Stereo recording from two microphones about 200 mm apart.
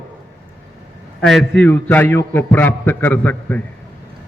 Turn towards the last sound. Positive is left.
turn(degrees=10)  # may be behind; listen again after turning